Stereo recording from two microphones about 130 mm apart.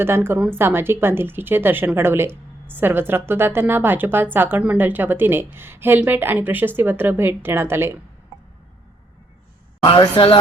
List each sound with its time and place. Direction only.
0.0 s a woman's voice: 20° right (ahead or behind)
9.8 s speech: 35° left (ahead or behind)